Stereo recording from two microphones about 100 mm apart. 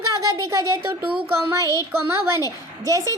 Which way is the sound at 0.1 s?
35° right (ahead or behind).